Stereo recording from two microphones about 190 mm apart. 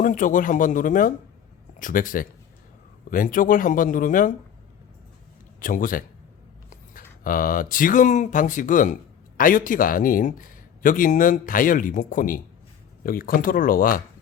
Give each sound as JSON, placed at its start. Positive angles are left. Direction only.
{"t": 0.0, "sound": "speech", "side_deg": 45}
{"t": 5.5, "sound": "speech", "side_deg": 45}